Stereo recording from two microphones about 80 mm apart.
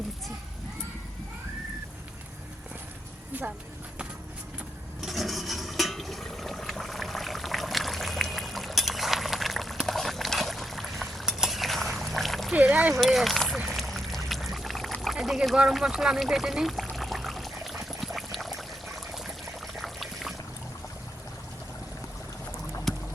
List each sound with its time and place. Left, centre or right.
3.3 s speech: centre
4.9 s water: centre
9.8 s boiling: centre
12.5 s a sound: centre
12.9 s speech: centre
13.7 s boat: centre
15.0 s a sound: centre
19.7 s pour: centre
22.9 s boat: centre